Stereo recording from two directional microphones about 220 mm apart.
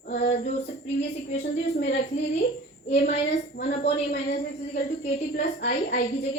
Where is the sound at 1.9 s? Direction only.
30° left (ahead or behind).